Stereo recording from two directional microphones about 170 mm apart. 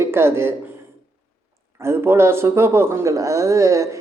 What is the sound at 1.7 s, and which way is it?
A woman's voice, 15° right (ahead or behind).